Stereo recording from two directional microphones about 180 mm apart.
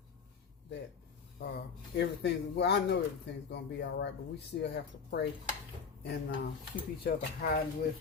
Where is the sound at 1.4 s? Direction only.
65° left (ahead or behind).